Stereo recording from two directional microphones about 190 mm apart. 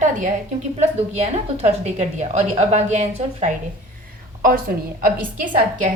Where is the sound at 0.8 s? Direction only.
35° right (ahead or behind).